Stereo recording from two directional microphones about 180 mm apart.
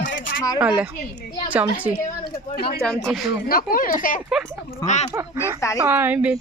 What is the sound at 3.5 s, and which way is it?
Speech, 50° left (ahead or behind).